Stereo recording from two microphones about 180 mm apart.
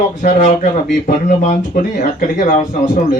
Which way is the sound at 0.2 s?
45° left (ahead or behind).